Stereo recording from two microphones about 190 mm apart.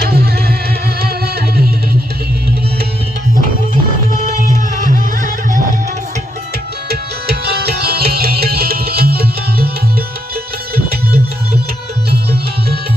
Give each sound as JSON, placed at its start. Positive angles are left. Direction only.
{"t": 0.0, "sound": "music", "side_deg": -55}
{"t": 4.4, "sound": "music", "side_deg": -45}
{"t": 6.8, "sound": "music", "side_deg": -55}